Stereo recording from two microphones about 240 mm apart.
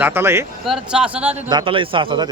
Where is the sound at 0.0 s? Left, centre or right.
Centre.